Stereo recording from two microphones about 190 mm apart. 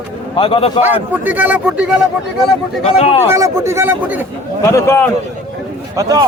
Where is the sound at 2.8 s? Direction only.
30° left (ahead or behind).